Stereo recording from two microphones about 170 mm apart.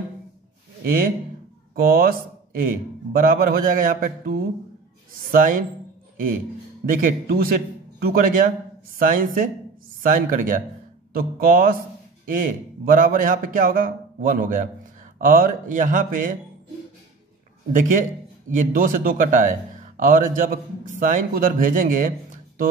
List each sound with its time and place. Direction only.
0.8 s a man's voice: 55° right (ahead or behind)
6.9 s a man's voice: 55° right (ahead or behind)
18.5 s speech: 55° right (ahead or behind)